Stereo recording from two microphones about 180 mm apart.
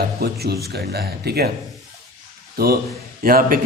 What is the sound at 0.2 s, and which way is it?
Speech, 60° right (ahead or behind).